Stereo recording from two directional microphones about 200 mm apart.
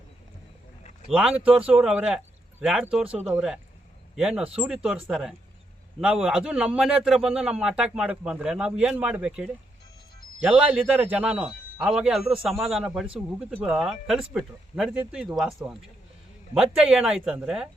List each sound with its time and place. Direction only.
1.1 s a man's voice: 5° right (ahead or behind)
3.1 s speech: 35° right (ahead or behind)
3.3 s a man's voice: 5° right (ahead or behind)